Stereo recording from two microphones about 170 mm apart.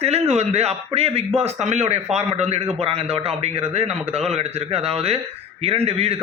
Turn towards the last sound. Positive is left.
turn(degrees=-35)  # may be behind; listen again after turning